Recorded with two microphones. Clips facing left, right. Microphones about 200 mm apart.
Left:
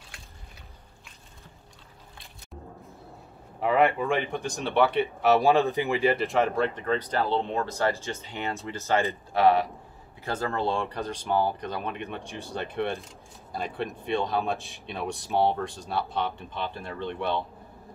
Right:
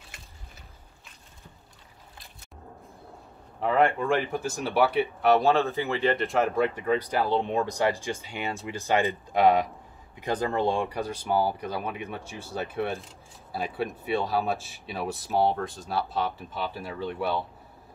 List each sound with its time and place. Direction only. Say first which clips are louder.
3.6 s speech: even; 5° left (ahead or behind)
6.1 s speech: even; centre (ahead or behind)